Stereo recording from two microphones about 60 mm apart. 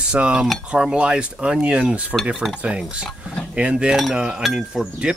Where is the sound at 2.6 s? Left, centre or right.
Centre.